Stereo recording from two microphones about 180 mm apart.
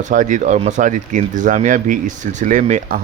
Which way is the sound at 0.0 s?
45° right (ahead or behind).